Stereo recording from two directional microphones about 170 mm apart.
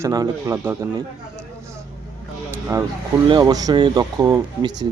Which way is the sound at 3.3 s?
25° right (ahead or behind).